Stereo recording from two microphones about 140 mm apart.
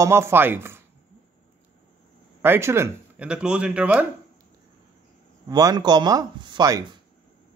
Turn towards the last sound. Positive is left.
turn(degrees=-30)  # may be behind; listen again after turning